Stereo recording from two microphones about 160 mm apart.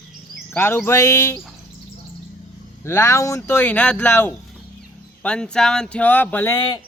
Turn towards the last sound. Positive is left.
turn(degrees=10)  # may be behind; listen again after turning